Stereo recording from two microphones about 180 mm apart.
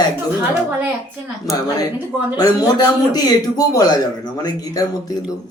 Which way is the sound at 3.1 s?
20° left (ahead or behind).